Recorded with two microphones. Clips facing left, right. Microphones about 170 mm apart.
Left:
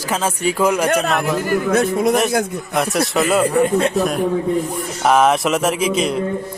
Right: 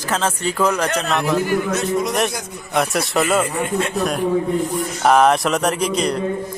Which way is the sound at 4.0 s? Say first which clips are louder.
Left 1 dB; centre (ahead or behind).